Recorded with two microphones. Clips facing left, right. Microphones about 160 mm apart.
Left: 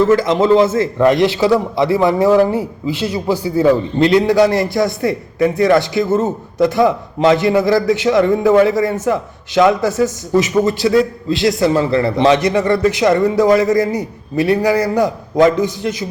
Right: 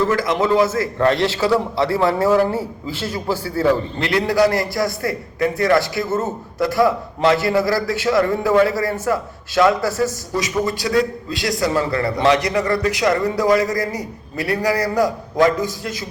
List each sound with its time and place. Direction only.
0.1 s a man's voice: 20° left (ahead or behind)